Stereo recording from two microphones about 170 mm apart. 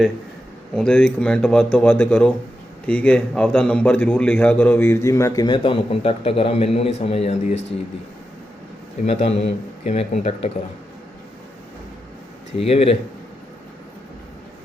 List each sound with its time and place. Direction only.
0.7 s a man's voice: 5° left (ahead or behind); by 7.6 s 35° left (ahead or behind)
9.0 s speech: 40° left (ahead or behind)
12.6 s speech: 35° left (ahead or behind)